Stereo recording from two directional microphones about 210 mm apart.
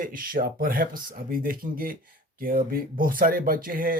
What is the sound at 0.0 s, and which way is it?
Speech, 40° right (ahead or behind).